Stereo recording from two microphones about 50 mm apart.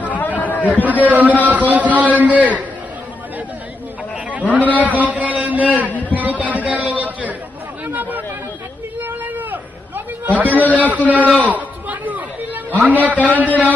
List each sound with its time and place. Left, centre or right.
0.1 s chatter: left
0.8 s a man's voice: right
4.3 s a man's voice: right
5.9 s a sound: left
6.1 s a man's voice: right
9.0 s a sound: right
10.6 s a man's voice: left
10.9 s a man's voice: right
11.4 s chatter: right
12.7 s a man's voice: right